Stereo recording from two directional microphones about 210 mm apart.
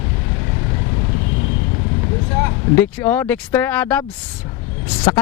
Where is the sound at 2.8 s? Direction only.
10° left (ahead or behind).